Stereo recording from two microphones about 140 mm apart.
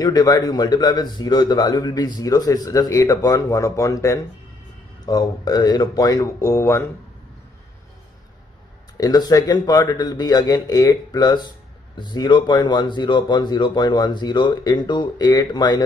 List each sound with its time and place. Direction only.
0.0 s a man's voice: 25° left (ahead or behind)
8.9 s a man's voice: 25° left (ahead or behind)